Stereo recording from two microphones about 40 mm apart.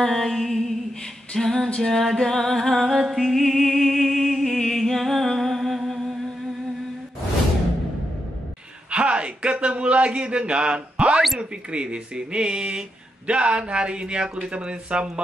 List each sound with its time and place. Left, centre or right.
0.0 s music: centre
1.3 s female singing: centre
1.8 s music: centre
8.9 s speech: right